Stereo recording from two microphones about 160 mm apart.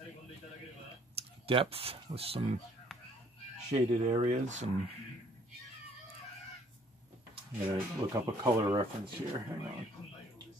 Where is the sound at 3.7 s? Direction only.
40° right (ahead or behind).